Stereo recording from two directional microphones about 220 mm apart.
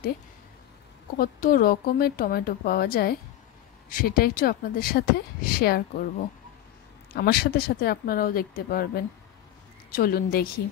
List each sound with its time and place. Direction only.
1.1 s speech: 40° left (ahead or behind)